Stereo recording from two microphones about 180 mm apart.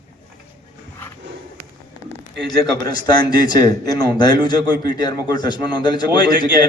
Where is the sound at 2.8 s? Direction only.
25° left (ahead or behind).